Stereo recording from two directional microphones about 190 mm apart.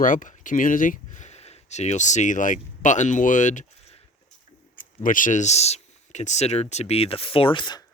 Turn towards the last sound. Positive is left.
turn(degrees=25)  # may be behind; listen again after turning